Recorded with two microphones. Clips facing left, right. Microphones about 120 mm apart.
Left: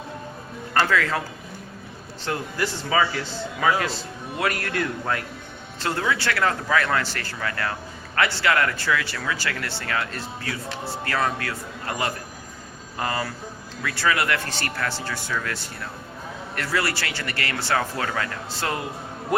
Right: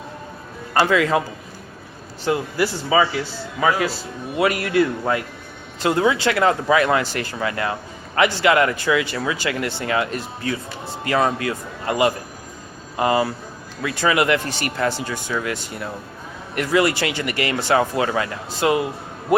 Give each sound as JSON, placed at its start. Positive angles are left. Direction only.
{"t": 0.7, "sound": "speech", "side_deg": -15}
{"t": 2.2, "sound": "a man's voice", "side_deg": -10}